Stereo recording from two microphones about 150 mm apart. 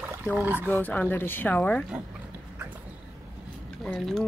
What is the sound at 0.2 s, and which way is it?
Speech, 10° right (ahead or behind).